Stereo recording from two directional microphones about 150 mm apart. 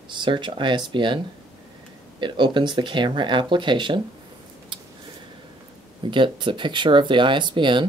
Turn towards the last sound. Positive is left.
turn(degrees=-30)  # may be behind; listen again after turning